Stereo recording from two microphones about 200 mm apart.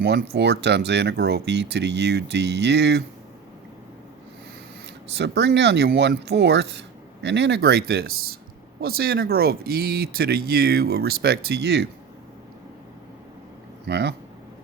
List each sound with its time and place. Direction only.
0.0 s speech: 55° right (ahead or behind)
5.1 s speech: 60° right (ahead or behind)
13.8 s speech: 55° right (ahead or behind)